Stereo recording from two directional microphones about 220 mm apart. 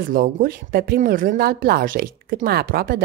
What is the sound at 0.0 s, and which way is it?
A woman's voice, 40° right (ahead or behind).